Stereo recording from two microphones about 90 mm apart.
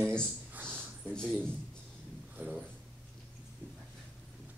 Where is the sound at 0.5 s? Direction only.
20° right (ahead or behind).